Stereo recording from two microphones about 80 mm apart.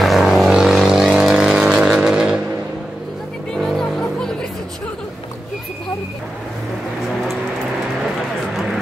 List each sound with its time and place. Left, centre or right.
0.0 s vehicle: centre
3.5 s music: centre